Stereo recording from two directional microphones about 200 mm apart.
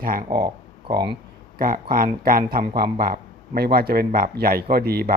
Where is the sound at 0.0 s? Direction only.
45° right (ahead or behind).